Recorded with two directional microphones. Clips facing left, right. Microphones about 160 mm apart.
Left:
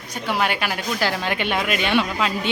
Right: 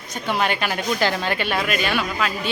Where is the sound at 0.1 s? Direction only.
10° left (ahead or behind).